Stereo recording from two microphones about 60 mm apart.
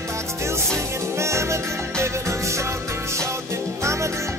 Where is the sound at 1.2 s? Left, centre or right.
Right.